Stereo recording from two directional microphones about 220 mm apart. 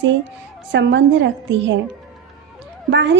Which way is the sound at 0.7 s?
55° right (ahead or behind).